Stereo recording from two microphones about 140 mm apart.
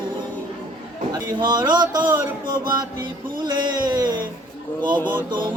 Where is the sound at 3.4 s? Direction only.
30° right (ahead or behind).